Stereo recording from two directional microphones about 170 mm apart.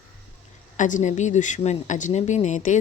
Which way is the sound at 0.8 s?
45° left (ahead or behind).